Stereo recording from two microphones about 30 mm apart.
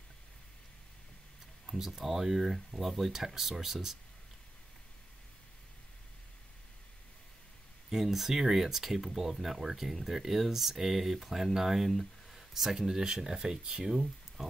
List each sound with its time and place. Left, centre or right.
1.7 s speech: centre
7.9 s speech: centre; by 13.8 s right
13.8 s speech: centre